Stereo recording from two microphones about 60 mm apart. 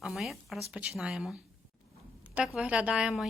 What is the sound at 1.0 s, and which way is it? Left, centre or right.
Speech, centre.